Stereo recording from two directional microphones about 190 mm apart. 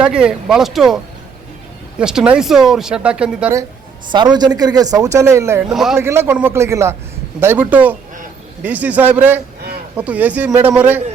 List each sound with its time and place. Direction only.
0.0 s speech: 5° right (ahead or behind)
2.0 s speech: 5° right (ahead or behind)
4.1 s speech: 20° right (ahead or behind)
5.7 s speech: centre (ahead or behind)
6.0 s speech: 15° right (ahead or behind)